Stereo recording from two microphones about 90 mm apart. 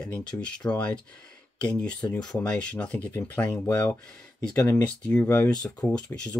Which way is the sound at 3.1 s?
25° left (ahead or behind).